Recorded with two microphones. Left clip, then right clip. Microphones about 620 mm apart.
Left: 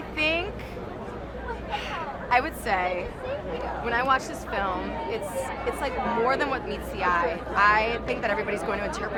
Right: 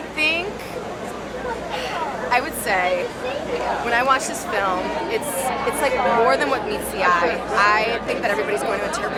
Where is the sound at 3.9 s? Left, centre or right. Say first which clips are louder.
Right 4 dB; left.